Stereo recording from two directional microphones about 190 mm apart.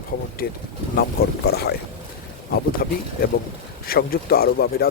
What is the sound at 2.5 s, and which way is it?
Speech, 55° left (ahead or behind).